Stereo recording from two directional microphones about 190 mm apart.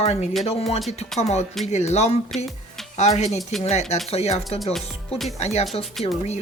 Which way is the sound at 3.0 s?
35° left (ahead or behind).